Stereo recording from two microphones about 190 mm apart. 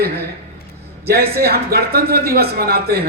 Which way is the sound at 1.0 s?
55° right (ahead or behind).